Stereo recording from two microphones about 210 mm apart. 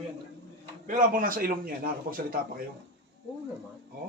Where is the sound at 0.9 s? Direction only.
40° right (ahead or behind).